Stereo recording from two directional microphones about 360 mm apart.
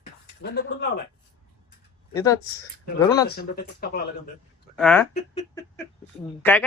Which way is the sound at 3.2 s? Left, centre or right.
Left.